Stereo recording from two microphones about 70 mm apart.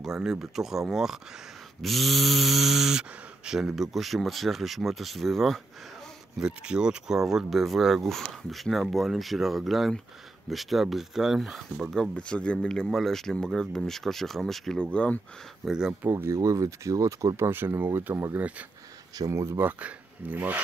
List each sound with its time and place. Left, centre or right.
0.0 s speech: centre
6.4 s speech: centre
11.9 s speech: centre
14.8 s speech: centre
15.6 s speech: centre
16.0 s speech: right
16.3 s speech: right
17.4 s speech: right
19.1 s speech: right
19.6 s speech: right